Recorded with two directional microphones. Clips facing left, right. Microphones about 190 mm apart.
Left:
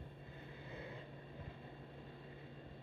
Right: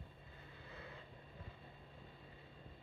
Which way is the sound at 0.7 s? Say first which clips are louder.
Left 4 dB; 20° left (ahead or behind).